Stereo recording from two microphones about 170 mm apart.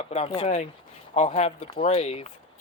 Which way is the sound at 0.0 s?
40° left (ahead or behind).